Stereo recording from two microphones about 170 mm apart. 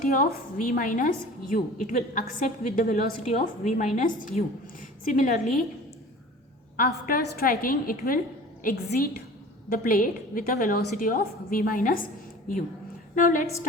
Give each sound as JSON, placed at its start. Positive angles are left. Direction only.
{"t": 0.0, "sound": "a woman's voice", "side_deg": 55}
{"t": 6.7, "sound": "a woman's voice", "side_deg": 55}
{"t": 13.1, "sound": "a woman's voice", "side_deg": 55}